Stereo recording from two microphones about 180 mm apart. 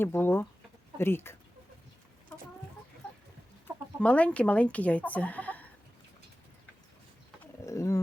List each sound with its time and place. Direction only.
0.0 s speech: 10° left (ahead or behind)
4.0 s speech: 5° left (ahead or behind)
7.6 s speech: 15° left (ahead or behind)